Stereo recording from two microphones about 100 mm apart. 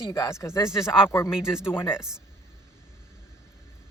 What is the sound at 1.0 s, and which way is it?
Speech, 25° left (ahead or behind).